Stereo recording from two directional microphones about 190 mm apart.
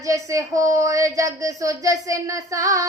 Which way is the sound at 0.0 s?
15° right (ahead or behind).